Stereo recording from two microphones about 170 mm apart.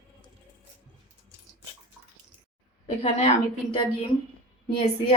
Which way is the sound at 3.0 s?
40° left (ahead or behind).